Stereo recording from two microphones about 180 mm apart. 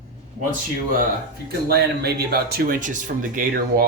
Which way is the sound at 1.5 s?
60° right (ahead or behind).